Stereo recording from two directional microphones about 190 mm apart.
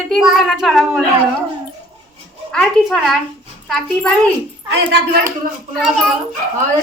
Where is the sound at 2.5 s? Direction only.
5° left (ahead or behind).